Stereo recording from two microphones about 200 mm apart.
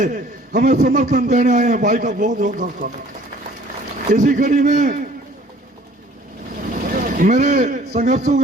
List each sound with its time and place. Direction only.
0.0 s a man's voice: 40° right (ahead or behind)
4.1 s a man's voice: 40° right (ahead or behind)
6.9 s a man's voice: 40° right (ahead or behind)